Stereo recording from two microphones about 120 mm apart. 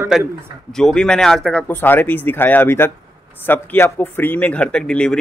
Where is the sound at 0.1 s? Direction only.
Centre (ahead or behind).